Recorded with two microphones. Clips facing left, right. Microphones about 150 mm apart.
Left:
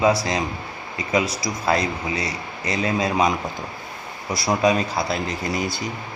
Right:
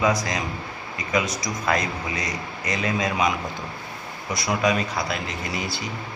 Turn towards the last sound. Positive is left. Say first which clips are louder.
# left 4 dB
turn(degrees=40)  # may be behind; listen again after turning